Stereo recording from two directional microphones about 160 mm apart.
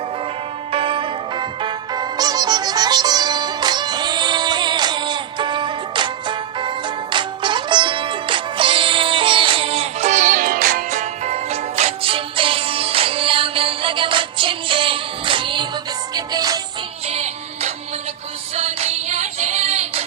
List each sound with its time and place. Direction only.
0.7 s music: 35° right (ahead or behind)
17.1 s music: 45° right (ahead or behind)